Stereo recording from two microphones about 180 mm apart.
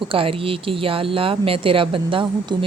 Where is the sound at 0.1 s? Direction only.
30° right (ahead or behind).